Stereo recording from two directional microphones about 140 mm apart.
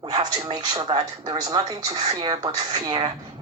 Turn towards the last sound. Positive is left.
turn(degrees=-30)  # may be behind; listen again after turning